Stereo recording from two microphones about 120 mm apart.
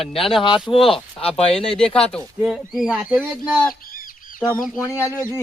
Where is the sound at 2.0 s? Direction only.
10° left (ahead or behind).